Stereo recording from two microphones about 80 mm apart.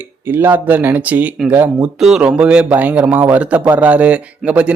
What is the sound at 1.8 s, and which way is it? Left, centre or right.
Speech, centre.